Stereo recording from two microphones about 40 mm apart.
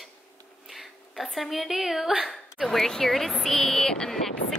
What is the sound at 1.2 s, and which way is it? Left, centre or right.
Speech, centre.